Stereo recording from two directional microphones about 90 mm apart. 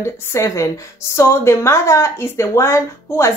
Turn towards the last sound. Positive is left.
turn(degrees=30)  # may be behind; listen again after turning